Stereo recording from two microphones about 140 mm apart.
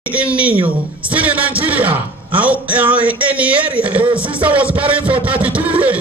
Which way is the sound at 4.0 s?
35° right (ahead or behind).